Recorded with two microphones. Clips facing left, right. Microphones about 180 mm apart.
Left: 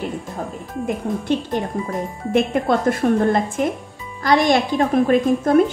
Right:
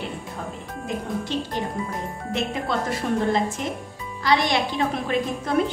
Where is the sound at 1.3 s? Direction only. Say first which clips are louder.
Left 8 dB; 55° left (ahead or behind).